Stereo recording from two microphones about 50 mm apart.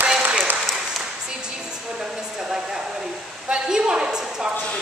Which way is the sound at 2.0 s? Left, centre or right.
Centre.